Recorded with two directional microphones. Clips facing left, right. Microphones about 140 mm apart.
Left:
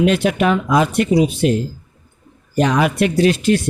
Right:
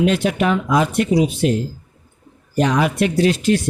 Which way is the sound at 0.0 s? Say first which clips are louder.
Left 2 dB; 70° left (ahead or behind).